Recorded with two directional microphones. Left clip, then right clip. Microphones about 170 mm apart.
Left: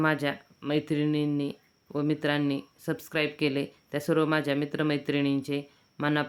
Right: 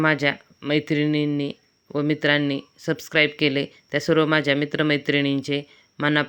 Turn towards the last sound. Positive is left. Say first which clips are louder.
# right 7 dB
turn(degrees=-25)  # may be behind; listen again after turning